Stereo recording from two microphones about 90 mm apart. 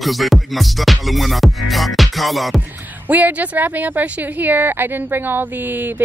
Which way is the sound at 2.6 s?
20° right (ahead or behind).